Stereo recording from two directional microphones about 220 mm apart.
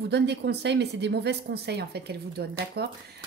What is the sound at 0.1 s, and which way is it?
Speech, 50° right (ahead or behind).